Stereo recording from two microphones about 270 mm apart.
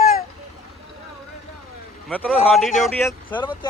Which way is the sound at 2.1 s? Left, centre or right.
Centre.